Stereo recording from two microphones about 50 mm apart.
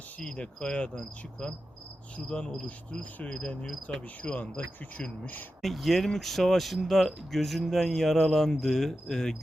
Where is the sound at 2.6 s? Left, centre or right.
Left.